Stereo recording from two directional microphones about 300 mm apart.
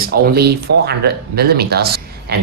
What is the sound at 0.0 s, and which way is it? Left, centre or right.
Speech, right.